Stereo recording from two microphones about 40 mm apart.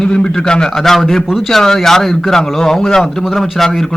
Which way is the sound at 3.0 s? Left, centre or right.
Centre.